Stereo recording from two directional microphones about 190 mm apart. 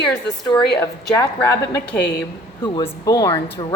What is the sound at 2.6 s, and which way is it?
Speech, 20° left (ahead or behind).